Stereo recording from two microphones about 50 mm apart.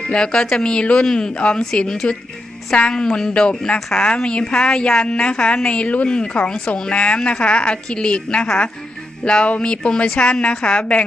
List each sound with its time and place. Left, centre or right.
0.0 s speech: centre
1.3 s a woman's voice: left
1.7 s a woman's voice: centre